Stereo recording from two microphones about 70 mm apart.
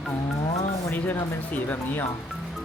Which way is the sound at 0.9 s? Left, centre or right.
Left.